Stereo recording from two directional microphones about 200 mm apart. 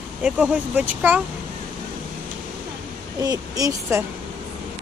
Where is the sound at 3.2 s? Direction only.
20° right (ahead or behind).